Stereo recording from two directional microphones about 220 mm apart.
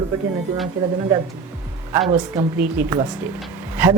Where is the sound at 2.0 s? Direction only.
20° right (ahead or behind).